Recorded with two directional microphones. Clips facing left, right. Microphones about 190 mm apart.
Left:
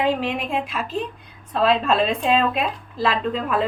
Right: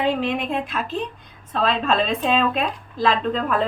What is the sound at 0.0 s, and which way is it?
A woman's voice, 5° left (ahead or behind).